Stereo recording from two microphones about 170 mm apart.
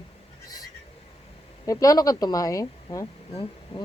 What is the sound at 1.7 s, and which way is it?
Speech, 20° left (ahead or behind).